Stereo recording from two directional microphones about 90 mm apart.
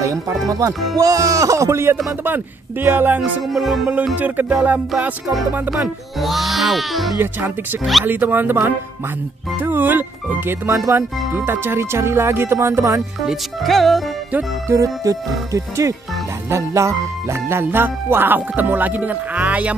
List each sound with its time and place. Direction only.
0.0 s music: 35° right (ahead or behind)
3.4 s speech: centre (ahead or behind)
3.9 s music: 15° right (ahead or behind)
6.1 s speech: centre (ahead or behind)
7.2 s music: 25° right (ahead or behind)
9.6 s speech: 20° right (ahead or behind)
11.3 s music: 25° right (ahead or behind)
13.2 s speech: centre (ahead or behind)
14.7 s music: 35° right (ahead or behind); by 19.7 s 15° right (ahead or behind)